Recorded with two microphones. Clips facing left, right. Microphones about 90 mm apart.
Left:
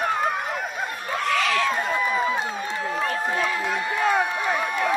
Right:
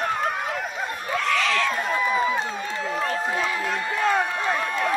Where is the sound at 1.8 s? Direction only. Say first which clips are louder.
Right 1 dB; centre (ahead or behind).